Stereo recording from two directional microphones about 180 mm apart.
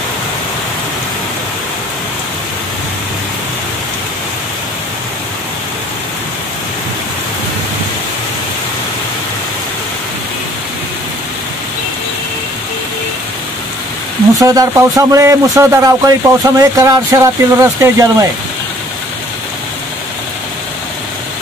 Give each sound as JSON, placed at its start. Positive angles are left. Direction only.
{"t": 14.4, "sound": "speech", "side_deg": -20}